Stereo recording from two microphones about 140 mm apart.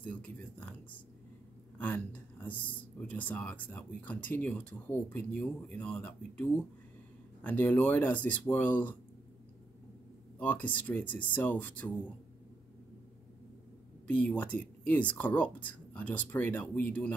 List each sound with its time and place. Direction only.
0.0 s speech: 10° left (ahead or behind)
1.8 s speech: 10° left (ahead or behind)
10.4 s speech: 10° left (ahead or behind)
14.1 s speech: 10° left (ahead or behind)